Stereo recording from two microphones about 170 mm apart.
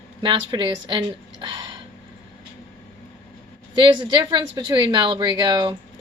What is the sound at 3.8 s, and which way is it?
A woman's voice, 25° right (ahead or behind).